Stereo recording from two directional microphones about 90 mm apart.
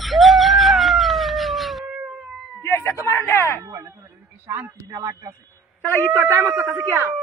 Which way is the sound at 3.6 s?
35° right (ahead or behind).